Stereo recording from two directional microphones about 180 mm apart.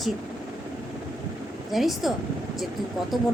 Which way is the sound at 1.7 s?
Centre (ahead or behind).